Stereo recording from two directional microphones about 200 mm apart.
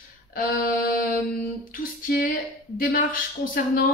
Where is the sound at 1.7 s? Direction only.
45° left (ahead or behind).